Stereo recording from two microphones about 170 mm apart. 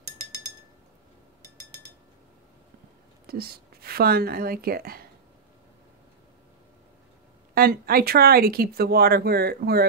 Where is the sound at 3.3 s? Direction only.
65° right (ahead or behind).